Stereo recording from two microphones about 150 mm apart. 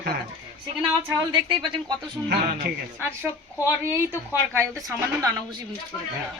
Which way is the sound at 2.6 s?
90° right.